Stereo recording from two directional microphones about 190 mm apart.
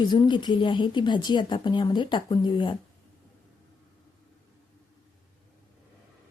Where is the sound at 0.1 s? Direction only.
25° left (ahead or behind).